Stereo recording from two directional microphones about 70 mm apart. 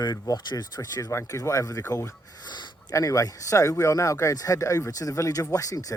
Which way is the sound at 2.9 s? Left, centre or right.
Left.